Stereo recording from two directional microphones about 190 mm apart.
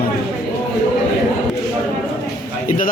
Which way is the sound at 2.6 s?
45° left (ahead or behind).